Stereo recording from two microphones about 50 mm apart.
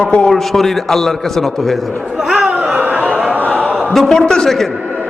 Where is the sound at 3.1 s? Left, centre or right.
Centre.